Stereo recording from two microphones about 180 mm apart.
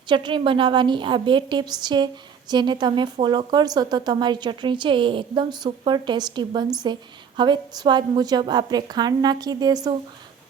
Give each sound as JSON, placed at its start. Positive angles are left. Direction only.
{"t": 0.1, "sound": "a woman's voice", "side_deg": -25}